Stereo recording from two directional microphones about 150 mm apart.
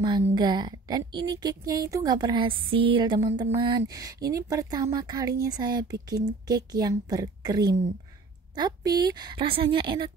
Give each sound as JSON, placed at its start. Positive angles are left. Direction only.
{"t": 0.3, "sound": "a woman's voice", "side_deg": -30}